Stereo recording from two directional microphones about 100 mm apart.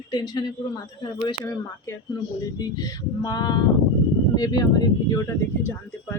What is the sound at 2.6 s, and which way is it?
Speech, 40° left (ahead or behind).